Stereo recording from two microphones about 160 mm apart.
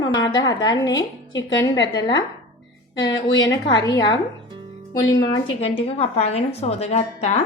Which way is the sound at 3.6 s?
25° left (ahead or behind).